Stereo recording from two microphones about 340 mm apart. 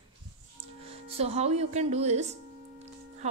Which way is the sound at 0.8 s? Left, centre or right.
Centre.